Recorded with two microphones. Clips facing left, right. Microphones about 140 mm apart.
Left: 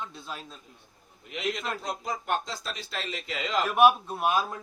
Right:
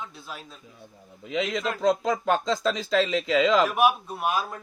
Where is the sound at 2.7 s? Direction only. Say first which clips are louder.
Right 13 dB; 90° right.